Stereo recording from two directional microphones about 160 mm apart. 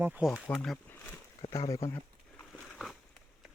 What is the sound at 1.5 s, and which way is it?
Speech, 20° left (ahead or behind).